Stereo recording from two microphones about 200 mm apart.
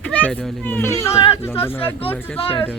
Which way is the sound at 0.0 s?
5° left (ahead or behind).